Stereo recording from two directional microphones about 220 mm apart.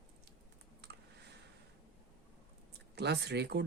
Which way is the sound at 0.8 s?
50° right (ahead or behind).